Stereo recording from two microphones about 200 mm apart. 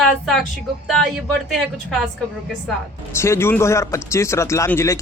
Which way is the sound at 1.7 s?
Centre (ahead or behind).